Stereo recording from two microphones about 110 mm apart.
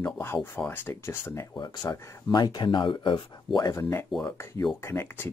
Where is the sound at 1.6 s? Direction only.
40° left (ahead or behind).